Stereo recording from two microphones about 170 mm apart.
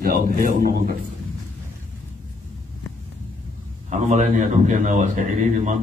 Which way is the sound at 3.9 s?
45° right (ahead or behind).